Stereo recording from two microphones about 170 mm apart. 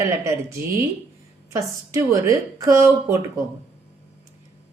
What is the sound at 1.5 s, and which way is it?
Speech, 20° right (ahead or behind).